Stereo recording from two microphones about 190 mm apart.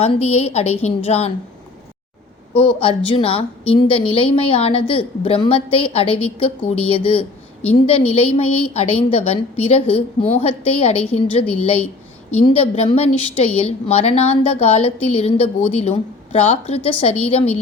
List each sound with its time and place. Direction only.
0.0 s a woman's voice: 35° left (ahead or behind)
2.5 s a woman's voice: 25° left (ahead or behind)